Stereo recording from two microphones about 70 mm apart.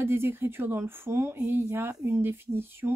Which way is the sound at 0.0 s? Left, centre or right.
Right.